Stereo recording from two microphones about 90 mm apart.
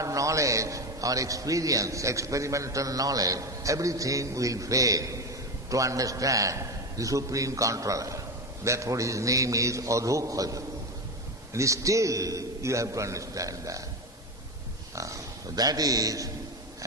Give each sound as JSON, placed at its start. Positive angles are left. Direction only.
{"t": 0.0, "sound": "a man's voice", "side_deg": -35}
{"t": 14.9, "sound": "a man's voice", "side_deg": -35}